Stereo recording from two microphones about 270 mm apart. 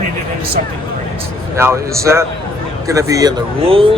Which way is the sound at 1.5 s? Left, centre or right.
Centre.